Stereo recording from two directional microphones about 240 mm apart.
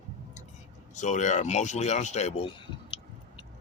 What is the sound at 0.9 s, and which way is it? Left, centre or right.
Speech, left.